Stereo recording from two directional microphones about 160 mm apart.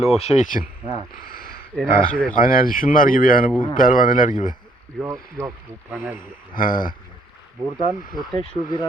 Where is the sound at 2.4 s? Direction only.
65° left (ahead or behind).